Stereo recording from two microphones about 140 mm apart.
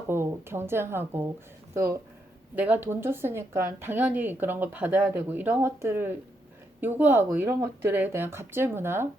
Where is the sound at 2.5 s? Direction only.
10° right (ahead or behind).